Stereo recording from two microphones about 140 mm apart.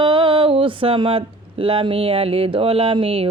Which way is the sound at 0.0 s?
40° right (ahead or behind).